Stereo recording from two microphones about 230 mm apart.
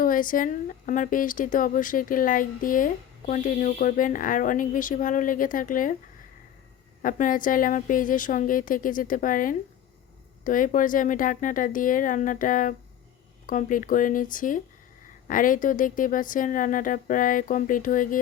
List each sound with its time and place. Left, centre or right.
0.0 s speech: left
7.0 s speech: left